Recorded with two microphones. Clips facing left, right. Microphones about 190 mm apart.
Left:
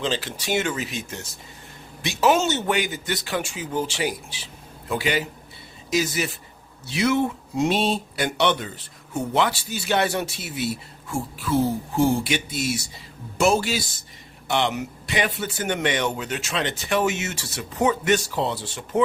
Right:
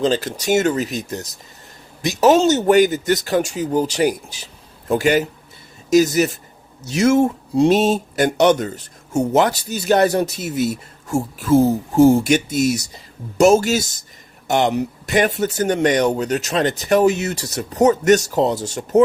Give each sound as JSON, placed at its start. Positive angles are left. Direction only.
{"t": 0.0, "sound": "speech", "side_deg": -40}